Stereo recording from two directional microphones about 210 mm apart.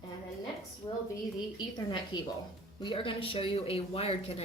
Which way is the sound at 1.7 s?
20° left (ahead or behind).